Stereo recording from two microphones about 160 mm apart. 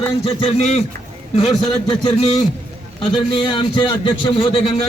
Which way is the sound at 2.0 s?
30° left (ahead or behind).